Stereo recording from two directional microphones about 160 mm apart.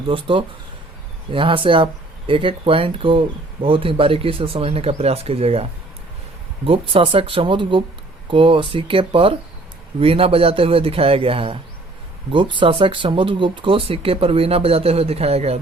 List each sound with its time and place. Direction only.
0.1 s speech: 30° right (ahead or behind)
6.7 s speech: 35° right (ahead or behind)